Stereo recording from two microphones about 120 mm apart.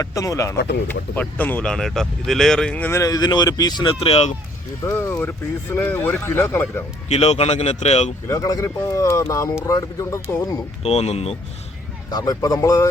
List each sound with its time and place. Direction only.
0.0 s speech: 25° left (ahead or behind); by 2.9 s 10° left (ahead or behind)
2.9 s speech: 30° left (ahead or behind)
4.0 s speech: 55° left (ahead or behind)
4.9 s speech: 20° left (ahead or behind)
7.1 s speech: 65° left (ahead or behind)
8.4 s speech: 30° left (ahead or behind)
10.8 s speech: 60° left (ahead or behind)
12.1 s speech: 30° left (ahead or behind)